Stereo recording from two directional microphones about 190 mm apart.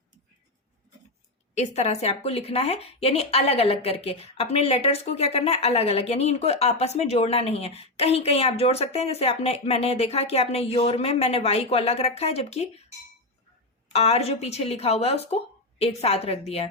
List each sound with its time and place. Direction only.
1.5 s speech: 35° left (ahead or behind)
13.9 s speech: 35° left (ahead or behind)